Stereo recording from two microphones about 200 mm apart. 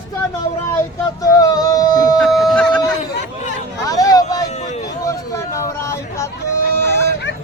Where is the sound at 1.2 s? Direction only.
20° left (ahead or behind).